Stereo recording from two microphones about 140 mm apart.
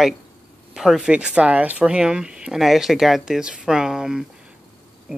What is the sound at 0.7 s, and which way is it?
Speech, 5° right (ahead or behind).